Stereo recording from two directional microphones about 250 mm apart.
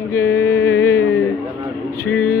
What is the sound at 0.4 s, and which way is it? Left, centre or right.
Music, centre.